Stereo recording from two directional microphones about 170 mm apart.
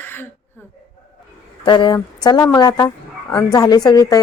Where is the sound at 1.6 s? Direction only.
25° left (ahead or behind).